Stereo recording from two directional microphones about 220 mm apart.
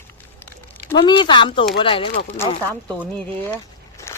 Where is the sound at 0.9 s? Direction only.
20° left (ahead or behind).